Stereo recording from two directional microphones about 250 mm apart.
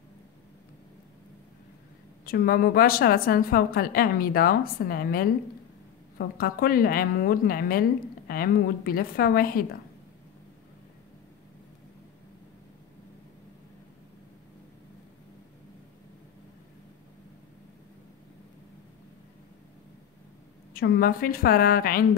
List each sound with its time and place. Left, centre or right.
2.2 s a woman's voice: left
20.7 s a woman's voice: left